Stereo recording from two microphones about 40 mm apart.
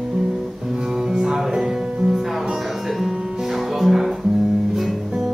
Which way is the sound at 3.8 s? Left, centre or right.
Centre.